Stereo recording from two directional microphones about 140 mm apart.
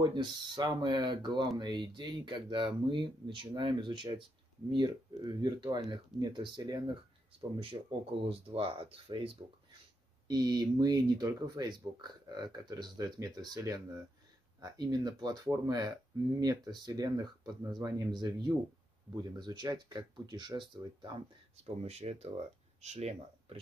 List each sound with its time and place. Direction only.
0.0 s speech: 30° right (ahead or behind)
10.2 s speech: 30° right (ahead or behind)
21.8 s speech: 50° right (ahead or behind)